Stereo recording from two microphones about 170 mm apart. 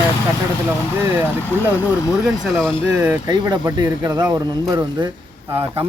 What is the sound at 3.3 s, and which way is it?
Speech, 25° right (ahead or behind).